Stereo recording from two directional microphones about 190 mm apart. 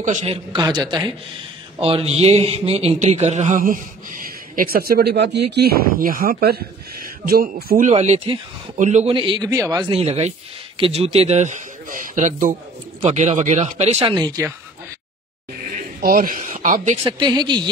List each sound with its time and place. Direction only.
0.2 s a man's voice: 25° right (ahead or behind); by 7.9 s 50° right (ahead or behind)
7.9 s a man's voice: 35° right (ahead or behind)
9.1 s a man's voice: 25° right (ahead or behind)
14.0 s a man's voice: 20° right (ahead or behind)
15.7 s speech: 45° right (ahead or behind)
17.0 s a man's voice: 20° right (ahead or behind)